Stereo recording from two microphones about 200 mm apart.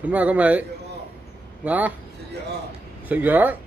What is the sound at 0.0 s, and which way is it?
Speech, 5° right (ahead or behind).